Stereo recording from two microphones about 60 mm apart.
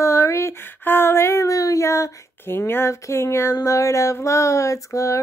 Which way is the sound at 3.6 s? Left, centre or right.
Left.